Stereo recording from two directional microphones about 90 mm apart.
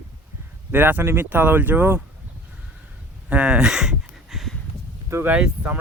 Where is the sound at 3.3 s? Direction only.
10° right (ahead or behind).